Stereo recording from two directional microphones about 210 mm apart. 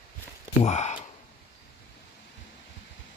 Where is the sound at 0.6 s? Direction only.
35° left (ahead or behind).